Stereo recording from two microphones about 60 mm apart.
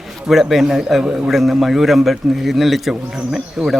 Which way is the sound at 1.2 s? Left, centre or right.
Centre.